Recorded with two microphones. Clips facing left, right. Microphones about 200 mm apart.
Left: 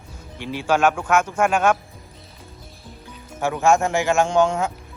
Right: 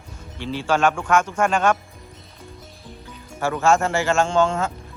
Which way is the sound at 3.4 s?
15° left (ahead or behind).